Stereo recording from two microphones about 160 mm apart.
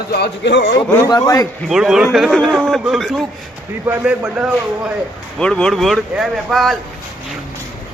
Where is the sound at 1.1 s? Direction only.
20° left (ahead or behind).